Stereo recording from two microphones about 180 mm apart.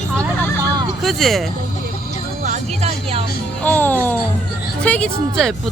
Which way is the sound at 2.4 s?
40° right (ahead or behind).